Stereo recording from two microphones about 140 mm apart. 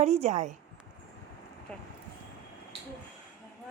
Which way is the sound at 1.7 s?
10° left (ahead or behind).